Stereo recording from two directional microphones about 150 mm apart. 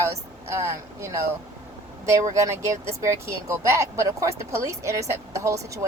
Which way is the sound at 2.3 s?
20° right (ahead or behind).